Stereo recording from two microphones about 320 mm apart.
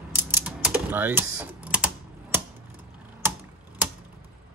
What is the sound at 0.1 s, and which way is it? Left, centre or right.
Typing, centre.